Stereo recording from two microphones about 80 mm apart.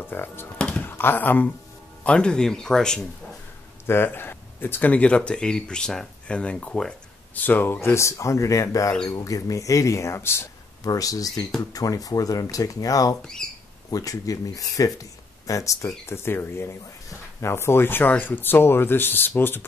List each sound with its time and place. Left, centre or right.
0.0 s speech: left
0.6 s a sound: centre
0.8 s speech: left
2.0 s speech: centre
3.8 s speech: left; by 6.9 s centre
7.3 s speech: left
7.8 s speech: left
10.8 s speech: left
13.4 s a sound: centre
13.8 s speech: left